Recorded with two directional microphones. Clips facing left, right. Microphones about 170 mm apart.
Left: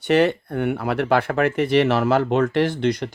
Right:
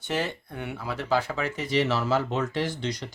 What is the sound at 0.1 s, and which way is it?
Speech, 65° left (ahead or behind).